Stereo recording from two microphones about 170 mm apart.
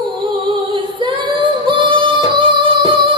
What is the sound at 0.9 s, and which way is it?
Singing, 30° right (ahead or behind).